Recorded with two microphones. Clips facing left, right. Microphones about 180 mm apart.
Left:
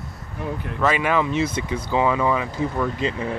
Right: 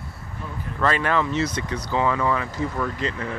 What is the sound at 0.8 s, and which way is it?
Speech, 10° left (ahead or behind).